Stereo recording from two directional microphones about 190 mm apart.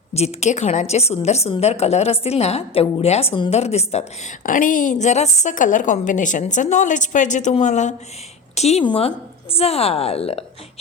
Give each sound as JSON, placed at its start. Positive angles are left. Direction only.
{"t": 0.1, "sound": "a woman's voice", "side_deg": 35}